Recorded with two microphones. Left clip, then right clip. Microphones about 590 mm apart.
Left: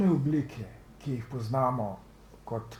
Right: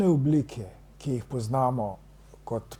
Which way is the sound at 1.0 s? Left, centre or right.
Right.